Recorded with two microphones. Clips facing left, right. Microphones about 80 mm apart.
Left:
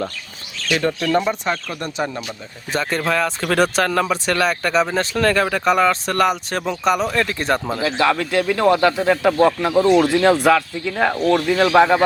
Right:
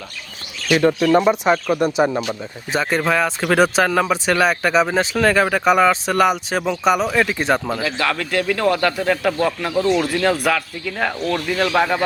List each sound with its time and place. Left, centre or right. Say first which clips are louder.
0.6 s speech: right 5 dB; centre
2.7 s speech: right 2 dB; centre
7.7 s speech: left 3 dB; left
11.7 s speech: left 6 dB; left